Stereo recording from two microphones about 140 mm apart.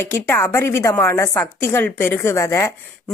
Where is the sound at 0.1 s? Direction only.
15° left (ahead or behind).